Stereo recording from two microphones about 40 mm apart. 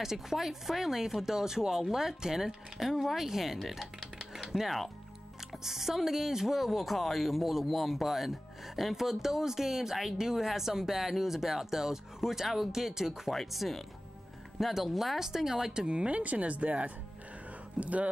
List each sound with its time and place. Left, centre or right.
0.0 s speech: centre
4.3 s a sound: centre
4.6 s speech: centre
13.3 s speech: centre; by 16.2 s right
16.2 s speech: right